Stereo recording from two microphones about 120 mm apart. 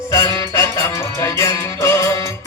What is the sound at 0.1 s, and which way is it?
Music, 25° left (ahead or behind).